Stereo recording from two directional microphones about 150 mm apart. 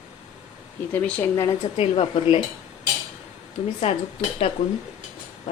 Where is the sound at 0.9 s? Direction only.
10° left (ahead or behind).